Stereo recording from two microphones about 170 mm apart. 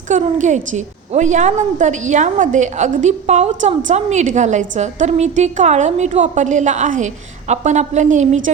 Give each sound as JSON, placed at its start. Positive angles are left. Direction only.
{"t": 0.1, "sound": "a woman's voice", "side_deg": -45}